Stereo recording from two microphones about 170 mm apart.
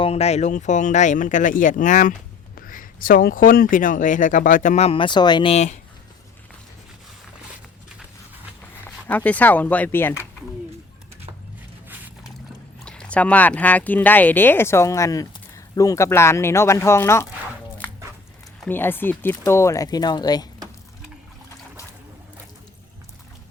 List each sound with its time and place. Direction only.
0.0 s speech: 40° left (ahead or behind)
8.8 s speech: 10° left (ahead or behind)
12.8 s speech: 5° left (ahead or behind)
18.6 s speech: 10° left (ahead or behind)